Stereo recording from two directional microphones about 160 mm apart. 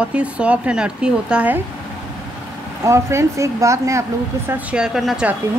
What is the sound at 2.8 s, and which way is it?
Speech, 20° right (ahead or behind).